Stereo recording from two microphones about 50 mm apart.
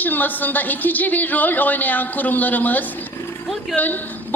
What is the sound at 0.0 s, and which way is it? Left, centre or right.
A woman's voice, left.